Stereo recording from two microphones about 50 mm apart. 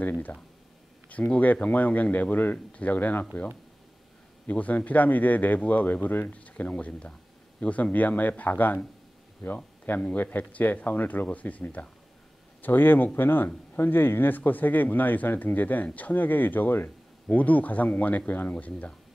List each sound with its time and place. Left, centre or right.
1.0 s speech: left
4.5 s speech: left
9.8 s speech: left
12.6 s speech: left
17.3 s speech: left